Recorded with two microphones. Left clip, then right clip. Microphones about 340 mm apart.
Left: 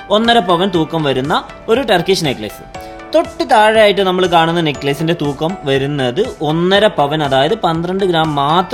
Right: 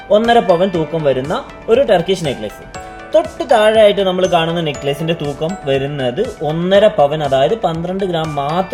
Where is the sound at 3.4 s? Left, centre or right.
Left.